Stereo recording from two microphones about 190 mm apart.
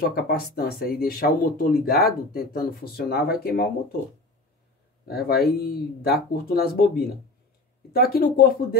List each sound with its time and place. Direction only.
0.0 s speech: 55° left (ahead or behind)
5.0 s speech: 55° left (ahead or behind)